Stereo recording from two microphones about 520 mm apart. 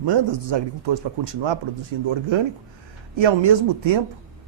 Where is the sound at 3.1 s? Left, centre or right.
Right.